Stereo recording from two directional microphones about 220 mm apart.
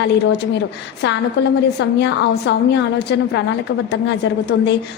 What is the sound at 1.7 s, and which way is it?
A woman's voice, 50° left (ahead or behind).